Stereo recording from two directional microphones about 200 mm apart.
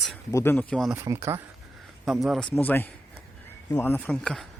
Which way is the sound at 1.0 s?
15° right (ahead or behind).